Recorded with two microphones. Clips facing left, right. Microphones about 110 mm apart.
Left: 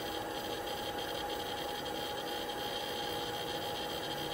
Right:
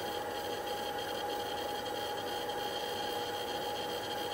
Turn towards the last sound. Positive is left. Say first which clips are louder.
# right 2 dB
turn(degrees=-45)  # may be behind; listen again after turning